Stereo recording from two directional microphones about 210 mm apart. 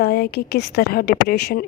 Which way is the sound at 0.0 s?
50° left (ahead or behind).